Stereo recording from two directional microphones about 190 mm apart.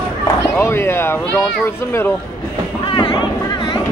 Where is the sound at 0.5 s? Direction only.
10° left (ahead or behind).